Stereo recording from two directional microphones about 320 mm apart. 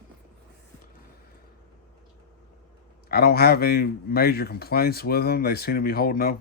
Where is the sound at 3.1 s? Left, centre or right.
Left.